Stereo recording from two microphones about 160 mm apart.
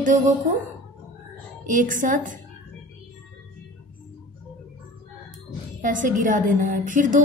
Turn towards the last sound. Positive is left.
turn(degrees=-55)  # may be behind; listen again after turning